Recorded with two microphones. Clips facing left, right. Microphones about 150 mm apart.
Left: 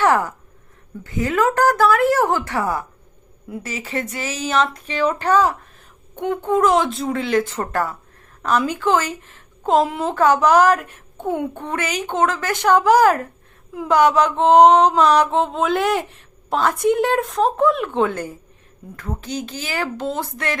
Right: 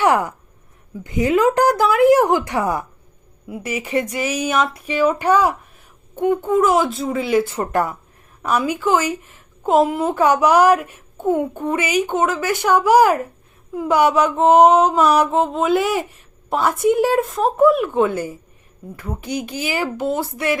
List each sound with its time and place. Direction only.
0.0 s a woman's voice: 15° right (ahead or behind)
6.1 s mantra: 5° right (ahead or behind)
8.4 s a woman's voice: 10° right (ahead or behind)
13.7 s mantra: 10° right (ahead or behind)
16.5 s a woman's voice: 10° right (ahead or behind)
16.8 s mantra: 5° right (ahead or behind)
18.9 s a woman's voice: 10° right (ahead or behind)